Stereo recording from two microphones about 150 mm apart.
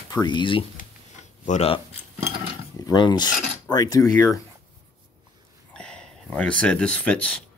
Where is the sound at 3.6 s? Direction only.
25° left (ahead or behind).